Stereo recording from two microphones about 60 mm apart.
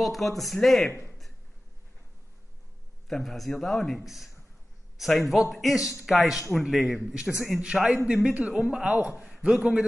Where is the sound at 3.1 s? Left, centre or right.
Centre.